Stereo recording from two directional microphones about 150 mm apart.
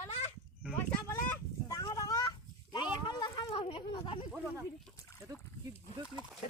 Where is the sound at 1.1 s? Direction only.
20° left (ahead or behind); by 4.2 s 35° left (ahead or behind).